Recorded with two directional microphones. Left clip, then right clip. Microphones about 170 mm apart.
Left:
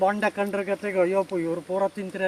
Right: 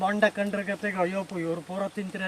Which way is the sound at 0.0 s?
20° right (ahead or behind).